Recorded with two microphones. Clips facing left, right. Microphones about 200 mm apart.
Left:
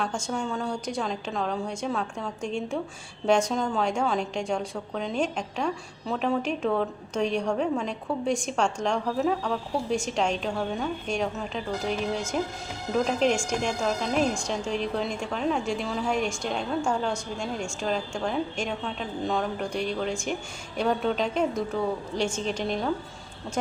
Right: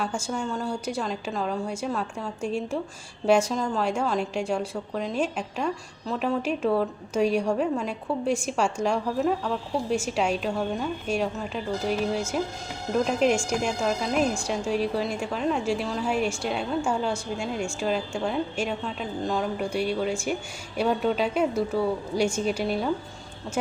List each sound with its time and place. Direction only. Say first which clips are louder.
0.0 s a woman's voice: even; 5° right (ahead or behind)